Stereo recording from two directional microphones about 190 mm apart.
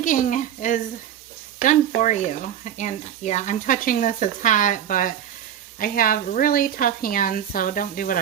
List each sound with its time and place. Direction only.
0.0 s a woman's voice: 40° left (ahead or behind)